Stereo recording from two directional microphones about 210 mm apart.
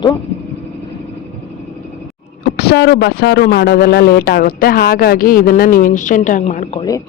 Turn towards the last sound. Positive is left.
turn(degrees=35)  # may be behind; listen again after turning